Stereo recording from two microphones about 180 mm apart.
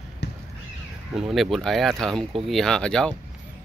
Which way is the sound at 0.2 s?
70° left (ahead or behind).